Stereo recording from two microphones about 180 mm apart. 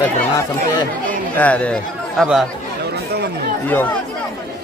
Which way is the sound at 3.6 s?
10° left (ahead or behind).